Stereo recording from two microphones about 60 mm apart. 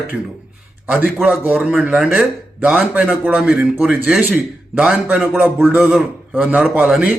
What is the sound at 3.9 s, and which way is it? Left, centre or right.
Speech, centre.